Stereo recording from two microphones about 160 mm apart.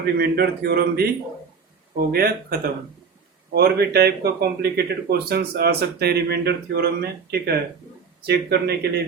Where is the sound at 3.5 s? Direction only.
85° right.